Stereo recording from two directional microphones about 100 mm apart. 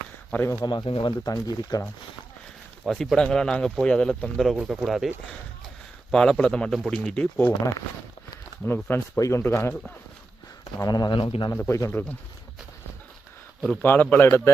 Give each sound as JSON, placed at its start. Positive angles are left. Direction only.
{"t": 0.3, "sound": "a man's voice", "side_deg": 25}
{"t": 0.6, "sound": "speech", "side_deg": 45}
{"t": 0.9, "sound": "a man's voice", "side_deg": 60}
{"t": 1.2, "sound": "speech", "side_deg": 40}
{"t": 2.8, "sound": "speech", "side_deg": 0}
{"t": 8.6, "sound": "a man's voice", "side_deg": 20}
{"t": 9.1, "sound": "a man's voice", "side_deg": 35}
{"t": 10.8, "sound": "speech", "side_deg": 40}
{"t": 11.2, "sound": "a man's voice", "side_deg": 60}
{"t": 11.7, "sound": "a man's voice", "side_deg": 30}
{"t": 13.8, "sound": "a man's voice", "side_deg": 20}